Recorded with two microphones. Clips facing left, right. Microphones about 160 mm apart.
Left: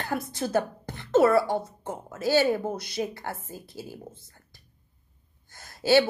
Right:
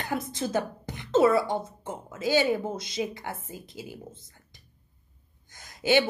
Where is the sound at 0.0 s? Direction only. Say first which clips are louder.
Even; 20° right (ahead or behind).